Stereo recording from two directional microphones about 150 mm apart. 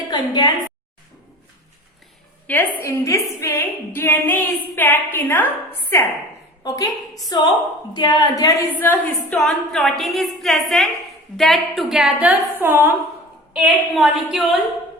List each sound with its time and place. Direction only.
0.1 s a woman's voice: 30° left (ahead or behind)
2.5 s a woman's voice: 10° left (ahead or behind)
6.7 s a woman's voice: 25° left (ahead or behind)
8.7 s a woman's voice: 10° left (ahead or behind); by 12.9 s 15° right (ahead or behind)
13.5 s a woman's voice: 5° right (ahead or behind)